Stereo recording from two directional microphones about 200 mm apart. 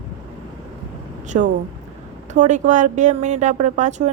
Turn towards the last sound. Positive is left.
turn(degrees=-35)  # may be behind; listen again after turning